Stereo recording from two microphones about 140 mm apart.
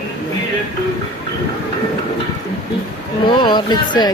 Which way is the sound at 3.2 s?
35° left (ahead or behind).